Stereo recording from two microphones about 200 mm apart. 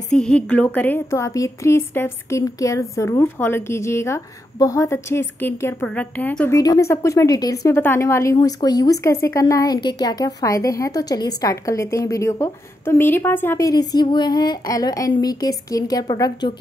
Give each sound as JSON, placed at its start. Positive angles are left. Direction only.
{"t": 0.1, "sound": "a woman's voice", "side_deg": 5}